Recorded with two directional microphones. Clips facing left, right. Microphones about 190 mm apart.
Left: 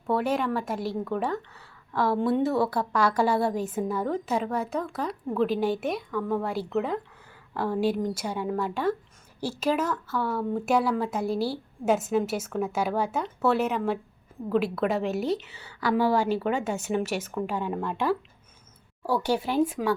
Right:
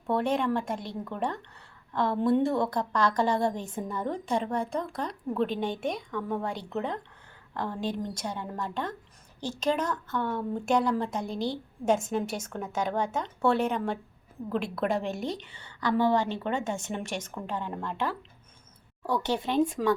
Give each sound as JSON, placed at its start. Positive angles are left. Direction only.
{"t": 0.1, "sound": "a woman's voice", "side_deg": 5}